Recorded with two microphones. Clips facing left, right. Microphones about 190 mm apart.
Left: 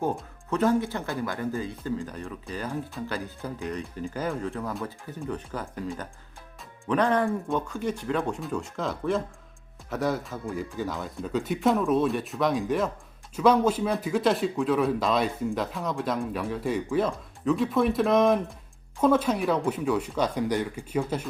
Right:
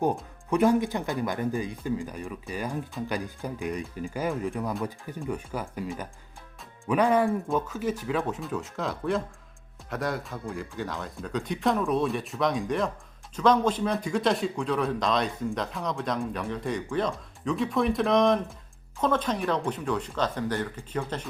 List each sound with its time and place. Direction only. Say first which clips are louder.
0.0 s speech: right 2 dB; 15° right (ahead or behind); by 21.2 s 10° left (ahead or behind)